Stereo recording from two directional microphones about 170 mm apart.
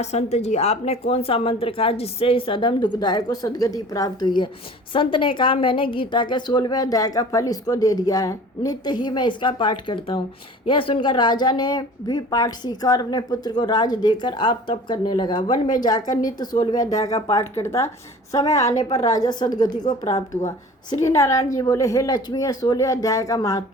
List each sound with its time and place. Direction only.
0.0 s a woman's voice: 40° left (ahead or behind); by 23.6 s 20° left (ahead or behind)